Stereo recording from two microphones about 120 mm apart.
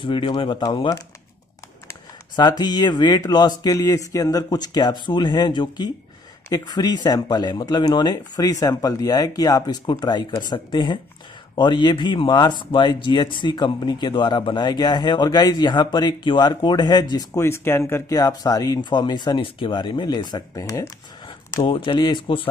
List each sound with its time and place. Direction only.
0.0 s speech: 45° left (ahead or behind)
17.4 s speech: 20° left (ahead or behind)
21.6 s speech: 40° left (ahead or behind)